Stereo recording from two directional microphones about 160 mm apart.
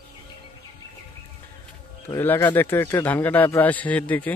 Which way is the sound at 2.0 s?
15° left (ahead or behind).